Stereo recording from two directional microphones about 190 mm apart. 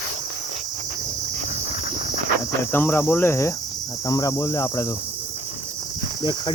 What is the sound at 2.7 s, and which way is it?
Cricket, 10° left (ahead or behind).